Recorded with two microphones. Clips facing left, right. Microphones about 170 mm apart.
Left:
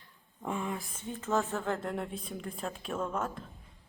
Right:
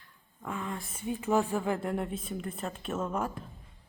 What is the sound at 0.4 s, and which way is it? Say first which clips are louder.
Speech: left 2 dB; 15° left (ahead or behind).